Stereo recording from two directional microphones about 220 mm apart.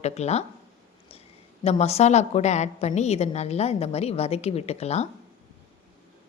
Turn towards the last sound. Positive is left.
turn(degrees=30)  # may be behind; listen again after turning